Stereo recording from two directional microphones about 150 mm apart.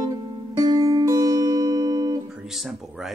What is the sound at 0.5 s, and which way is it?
Music, 25° right (ahead or behind).